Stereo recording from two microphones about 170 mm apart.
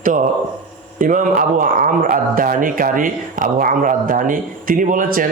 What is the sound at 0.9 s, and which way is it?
Speech, 50° right (ahead or behind).